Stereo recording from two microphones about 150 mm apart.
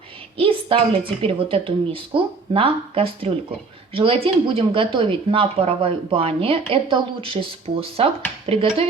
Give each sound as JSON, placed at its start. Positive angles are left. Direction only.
{"t": 0.3, "sound": "speech", "side_deg": -35}